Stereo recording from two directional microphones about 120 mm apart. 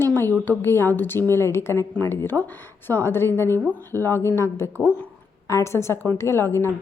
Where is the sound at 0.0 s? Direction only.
15° left (ahead or behind).